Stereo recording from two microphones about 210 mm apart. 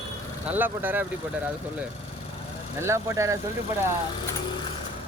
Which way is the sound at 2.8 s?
15° right (ahead or behind).